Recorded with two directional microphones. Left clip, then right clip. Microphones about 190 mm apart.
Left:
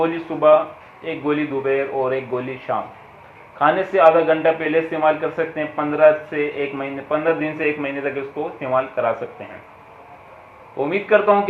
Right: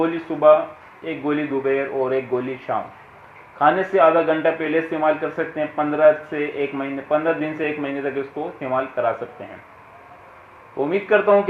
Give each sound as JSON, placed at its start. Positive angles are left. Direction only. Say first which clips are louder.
{"t": 0.0, "sound": "speech", "louder": "even", "side_deg": -50}
{"t": 10.8, "sound": "speech", "louder": "left 1 dB", "side_deg": -50}